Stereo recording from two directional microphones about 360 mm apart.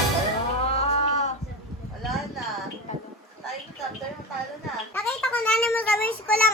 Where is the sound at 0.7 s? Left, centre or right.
Centre.